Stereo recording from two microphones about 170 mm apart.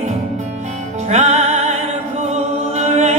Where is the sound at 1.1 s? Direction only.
40° right (ahead or behind).